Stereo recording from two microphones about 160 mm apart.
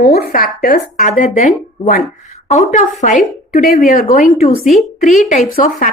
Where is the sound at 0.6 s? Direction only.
60° left (ahead or behind).